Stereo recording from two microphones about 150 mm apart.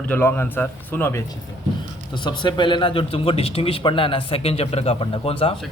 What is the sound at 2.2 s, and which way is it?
A man's voice, 30° left (ahead or behind).